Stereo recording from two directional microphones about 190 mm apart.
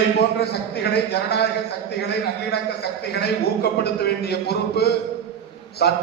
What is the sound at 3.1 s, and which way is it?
A man's voice, 60° left (ahead or behind).